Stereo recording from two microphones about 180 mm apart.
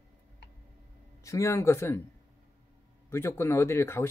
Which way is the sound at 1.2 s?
15° left (ahead or behind).